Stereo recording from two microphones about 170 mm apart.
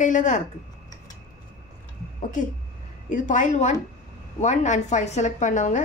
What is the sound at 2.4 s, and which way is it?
Speech, 50° left (ahead or behind).